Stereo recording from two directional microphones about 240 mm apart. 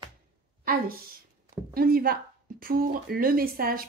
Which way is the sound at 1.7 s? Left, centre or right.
Right.